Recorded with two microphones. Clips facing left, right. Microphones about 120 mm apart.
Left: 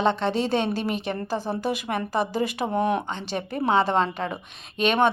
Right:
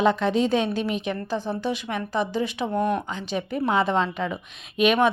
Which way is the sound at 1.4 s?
40° left (ahead or behind).